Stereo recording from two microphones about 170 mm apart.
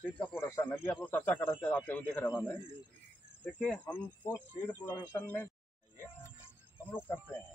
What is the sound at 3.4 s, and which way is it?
Speech, 5° left (ahead or behind).